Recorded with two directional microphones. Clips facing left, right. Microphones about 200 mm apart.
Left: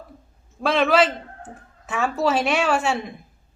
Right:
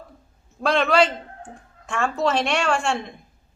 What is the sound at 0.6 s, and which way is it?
A woman's voice, centre (ahead or behind).